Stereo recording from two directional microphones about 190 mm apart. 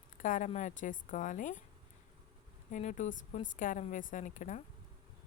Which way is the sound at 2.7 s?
40° left (ahead or behind).